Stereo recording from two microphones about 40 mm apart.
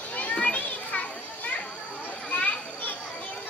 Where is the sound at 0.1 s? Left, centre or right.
Left.